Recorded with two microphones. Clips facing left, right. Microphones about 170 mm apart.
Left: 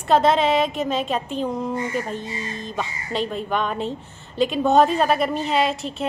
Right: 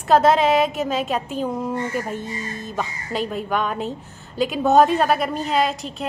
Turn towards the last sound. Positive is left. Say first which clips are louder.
# even
turn(degrees=0)  # may be behind; listen again after turning